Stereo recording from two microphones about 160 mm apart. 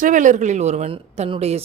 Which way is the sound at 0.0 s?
55° right (ahead or behind).